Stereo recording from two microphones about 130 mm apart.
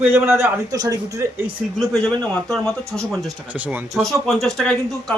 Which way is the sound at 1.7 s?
5° left (ahead or behind).